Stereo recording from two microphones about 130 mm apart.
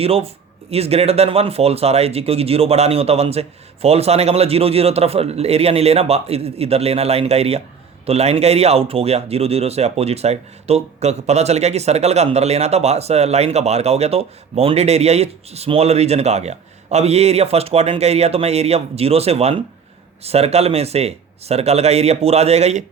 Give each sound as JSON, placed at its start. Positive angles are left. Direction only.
{"t": 0.0, "sound": "speech", "side_deg": -50}